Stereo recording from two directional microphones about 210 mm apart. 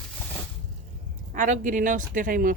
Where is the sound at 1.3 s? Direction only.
35° right (ahead or behind).